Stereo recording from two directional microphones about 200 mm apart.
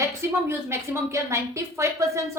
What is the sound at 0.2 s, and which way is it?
Speech, 15° right (ahead or behind).